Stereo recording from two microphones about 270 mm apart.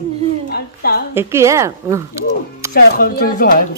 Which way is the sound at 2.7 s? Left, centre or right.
Left.